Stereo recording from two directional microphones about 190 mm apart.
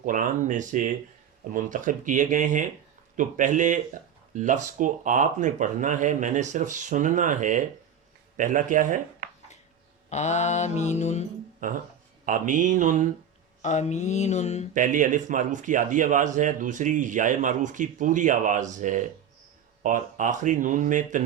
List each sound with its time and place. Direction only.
0.0 s a man's voice: 45° right (ahead or behind)
10.1 s mantra: 35° left (ahead or behind)
12.2 s a man's voice: 45° right (ahead or behind)
13.6 s mantra: 40° left (ahead or behind)
14.7 s a man's voice: 40° right (ahead or behind)